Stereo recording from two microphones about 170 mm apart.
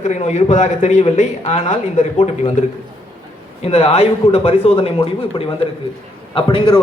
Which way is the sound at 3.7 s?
35° left (ahead or behind).